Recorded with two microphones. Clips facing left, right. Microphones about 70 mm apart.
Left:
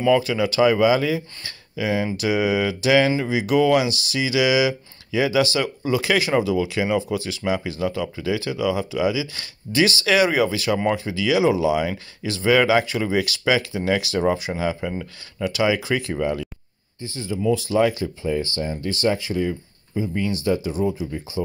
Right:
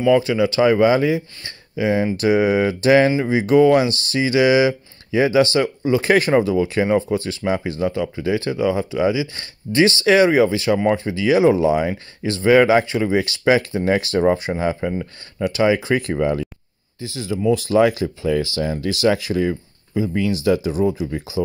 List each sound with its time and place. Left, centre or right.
0.2 s speech: right
3.1 s speech: right
6.0 s speech: right
14.8 s speech: centre
15.4 s speech: right
16.0 s speech: right
17.0 s speech: right
17.5 s speech: right